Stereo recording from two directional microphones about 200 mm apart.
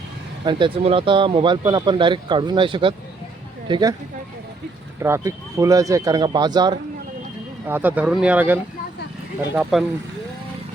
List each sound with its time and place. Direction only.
0.4 s speech: 25° right (ahead or behind)
4.9 s speech: 15° right (ahead or behind)
7.7 s speech: 10° right (ahead or behind)
9.7 s speech: centre (ahead or behind)